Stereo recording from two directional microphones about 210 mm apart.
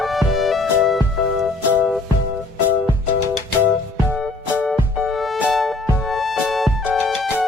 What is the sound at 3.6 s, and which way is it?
Music, 5° right (ahead or behind).